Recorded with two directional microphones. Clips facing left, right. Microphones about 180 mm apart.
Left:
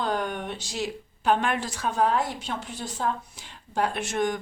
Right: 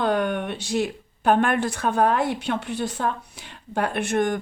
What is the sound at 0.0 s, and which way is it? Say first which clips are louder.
A woman's voice: right 6 dB; 60° right (ahead or behind).